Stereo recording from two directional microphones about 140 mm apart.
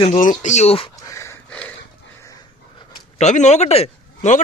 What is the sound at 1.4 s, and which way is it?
Dog, 10° left (ahead or behind).